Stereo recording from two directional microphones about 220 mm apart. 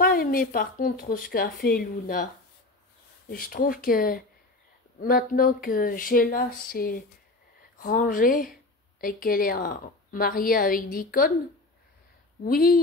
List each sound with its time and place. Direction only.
0.0 s a woman's voice: 40° left (ahead or behind)
3.3 s a woman's voice: 40° left (ahead or behind)
12.4 s speech: 40° left (ahead or behind)